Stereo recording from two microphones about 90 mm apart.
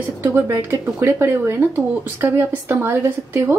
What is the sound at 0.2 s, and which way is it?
A woman's voice, 25° right (ahead or behind).